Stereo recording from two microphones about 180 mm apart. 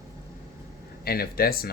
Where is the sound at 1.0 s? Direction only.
55° left (ahead or behind).